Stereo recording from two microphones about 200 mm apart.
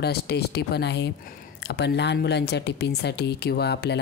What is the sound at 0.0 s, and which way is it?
Speech, 55° left (ahead or behind).